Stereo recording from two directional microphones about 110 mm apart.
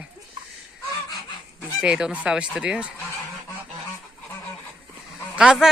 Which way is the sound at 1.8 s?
10° right (ahead or behind).